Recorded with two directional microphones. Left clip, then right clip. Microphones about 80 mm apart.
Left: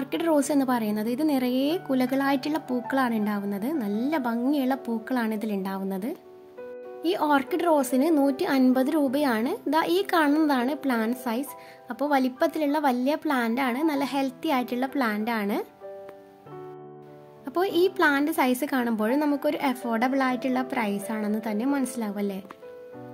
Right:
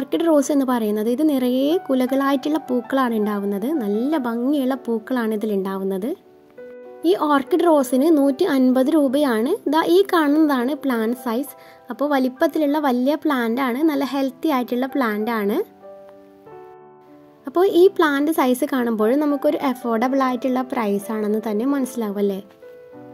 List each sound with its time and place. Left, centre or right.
0.0 s a woman's voice: right
17.5 s a woman's voice: right